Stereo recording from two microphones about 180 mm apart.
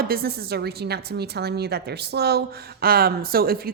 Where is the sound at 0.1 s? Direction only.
55° right (ahead or behind).